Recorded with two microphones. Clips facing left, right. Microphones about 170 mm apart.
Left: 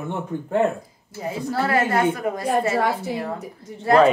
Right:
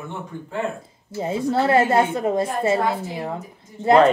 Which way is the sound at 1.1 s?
25° right (ahead or behind).